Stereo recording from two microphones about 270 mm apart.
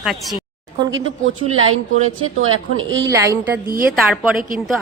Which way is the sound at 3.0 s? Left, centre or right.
Centre.